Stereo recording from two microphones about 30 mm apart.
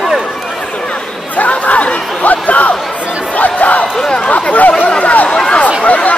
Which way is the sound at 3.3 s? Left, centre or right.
Left.